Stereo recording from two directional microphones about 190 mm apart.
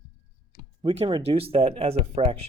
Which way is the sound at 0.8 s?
30° right (ahead or behind).